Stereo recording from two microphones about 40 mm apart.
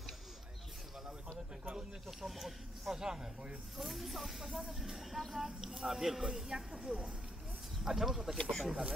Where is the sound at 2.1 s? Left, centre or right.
Centre.